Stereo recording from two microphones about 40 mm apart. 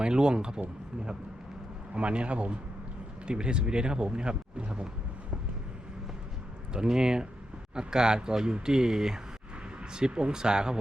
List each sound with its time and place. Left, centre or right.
0.0 s speech: right
2.0 s a man's voice: right
6.7 s speech: centre